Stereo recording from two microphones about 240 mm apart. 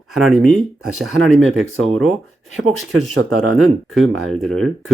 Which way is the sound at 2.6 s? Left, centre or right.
Right.